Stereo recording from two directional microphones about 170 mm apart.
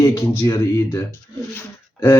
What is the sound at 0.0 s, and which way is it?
A man's voice, 20° left (ahead or behind).